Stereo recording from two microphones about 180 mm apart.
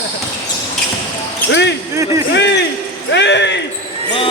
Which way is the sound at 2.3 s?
75° left (ahead or behind).